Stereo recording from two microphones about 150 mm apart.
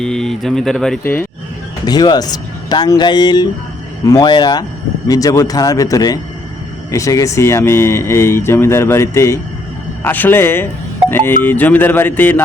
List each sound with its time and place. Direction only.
0.0 s speech: 5° left (ahead or behind)
1.9 s speech: 25° left (ahead or behind)